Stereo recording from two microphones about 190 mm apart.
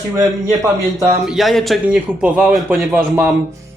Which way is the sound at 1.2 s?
Centre (ahead or behind).